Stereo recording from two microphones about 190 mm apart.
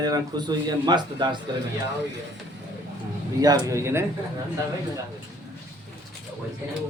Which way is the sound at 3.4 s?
15° right (ahead or behind).